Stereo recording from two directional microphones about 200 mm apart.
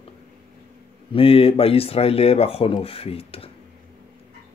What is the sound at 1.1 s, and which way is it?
Speech, 30° left (ahead or behind).